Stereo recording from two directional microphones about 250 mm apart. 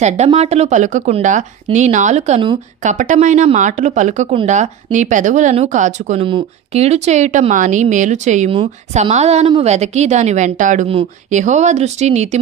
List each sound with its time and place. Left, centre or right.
0.0 s speech: right